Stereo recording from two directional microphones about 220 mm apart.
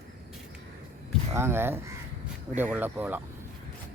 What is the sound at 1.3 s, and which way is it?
Speech, 10° right (ahead or behind).